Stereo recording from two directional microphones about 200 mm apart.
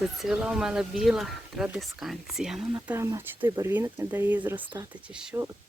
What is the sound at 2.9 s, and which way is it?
Speech, 15° right (ahead or behind).